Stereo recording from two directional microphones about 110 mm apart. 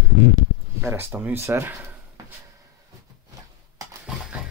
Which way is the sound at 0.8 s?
20° right (ahead or behind).